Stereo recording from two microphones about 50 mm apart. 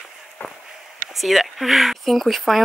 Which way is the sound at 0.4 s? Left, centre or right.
Left.